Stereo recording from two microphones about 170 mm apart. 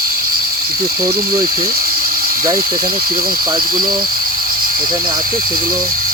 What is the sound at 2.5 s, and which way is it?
Speech, 60° right (ahead or behind).